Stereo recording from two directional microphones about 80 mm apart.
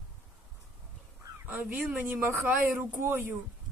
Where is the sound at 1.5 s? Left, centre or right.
Centre.